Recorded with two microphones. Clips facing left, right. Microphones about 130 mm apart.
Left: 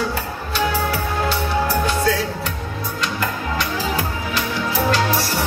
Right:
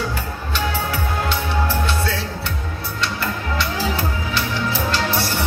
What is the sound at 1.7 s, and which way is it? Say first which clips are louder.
Music: left 4 dB; 40° left (ahead or behind).